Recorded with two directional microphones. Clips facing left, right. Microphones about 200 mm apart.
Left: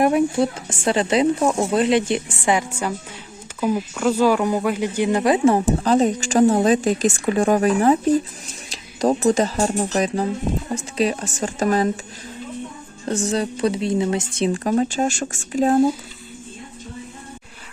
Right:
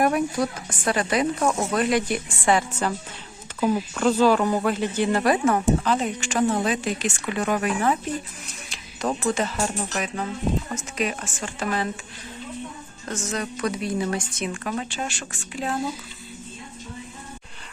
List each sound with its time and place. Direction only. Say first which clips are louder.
0.0 s speech: left 5 dB; 25° left (ahead or behind); by 11.9 s 40° left (ahead or behind)
13.1 s speech: left 7 dB; 30° left (ahead or behind)